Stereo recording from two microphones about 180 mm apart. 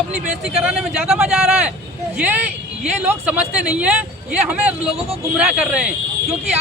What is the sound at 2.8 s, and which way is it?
Speech, 10° right (ahead or behind).